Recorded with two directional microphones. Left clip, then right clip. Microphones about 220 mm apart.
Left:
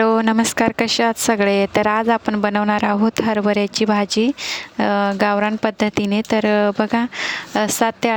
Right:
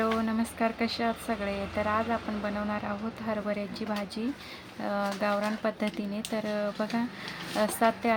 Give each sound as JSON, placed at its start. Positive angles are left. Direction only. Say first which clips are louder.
{"t": 0.0, "sound": "speech", "louder": "left 13 dB", "side_deg": 45}